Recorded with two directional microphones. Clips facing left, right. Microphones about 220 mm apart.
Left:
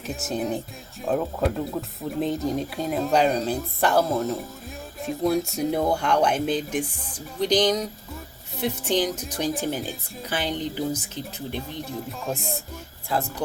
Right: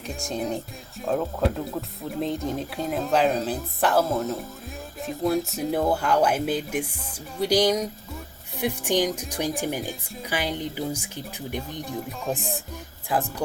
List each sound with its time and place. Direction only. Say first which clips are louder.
0.0 s speech: left 2 dB; 5° left (ahead or behind); by 11.9 s 15° right (ahead or behind)
12.2 s speech: right 1 dB; centre (ahead or behind)
13.1 s speech: right 1 dB; 15° right (ahead or behind)